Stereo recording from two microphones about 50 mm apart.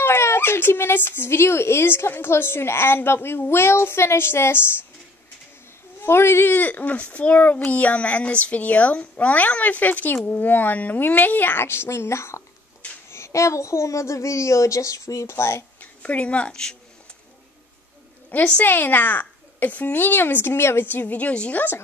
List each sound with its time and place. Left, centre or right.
0.0 s speech: left
6.0 s speech: left
6.5 s a child's voice: left
11.6 s speech: left
13.1 s a woman's voice: left
15.8 s speech: left
18.6 s a child's voice: left
20.8 s a child's voice: left